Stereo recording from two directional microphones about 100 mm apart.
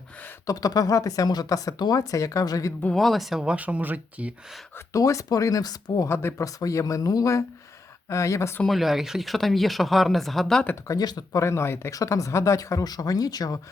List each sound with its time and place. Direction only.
0.4 s speech: 40° left (ahead or behind)
2.9 s speech: centre (ahead or behind); by 4.4 s 15° right (ahead or behind)
4.9 s speech: 35° left (ahead or behind)
8.6 s speech: centre (ahead or behind)
10.8 s speech: 40° left (ahead or behind)